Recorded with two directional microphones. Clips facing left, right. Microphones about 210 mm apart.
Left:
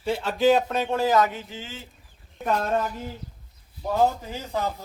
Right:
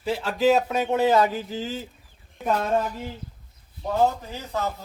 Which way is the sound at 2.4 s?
5° right (ahead or behind).